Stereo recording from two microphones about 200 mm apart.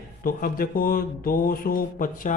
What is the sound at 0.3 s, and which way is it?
A man's voice, 45° left (ahead or behind).